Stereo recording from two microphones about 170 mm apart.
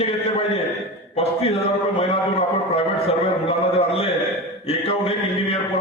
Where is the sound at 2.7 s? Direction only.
35° left (ahead or behind).